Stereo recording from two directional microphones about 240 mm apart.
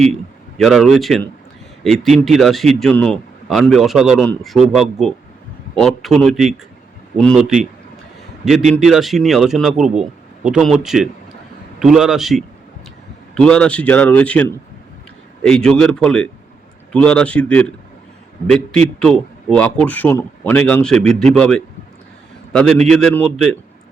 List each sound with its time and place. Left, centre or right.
0.6 s a man's voice: centre